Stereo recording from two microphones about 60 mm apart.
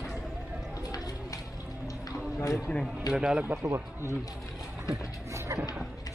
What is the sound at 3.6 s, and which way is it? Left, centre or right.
Speech, right.